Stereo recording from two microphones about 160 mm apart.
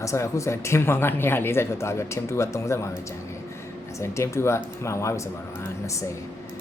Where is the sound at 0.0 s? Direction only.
20° left (ahead or behind).